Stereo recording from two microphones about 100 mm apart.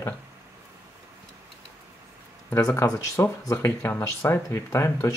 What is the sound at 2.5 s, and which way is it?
Speech, 30° left (ahead or behind).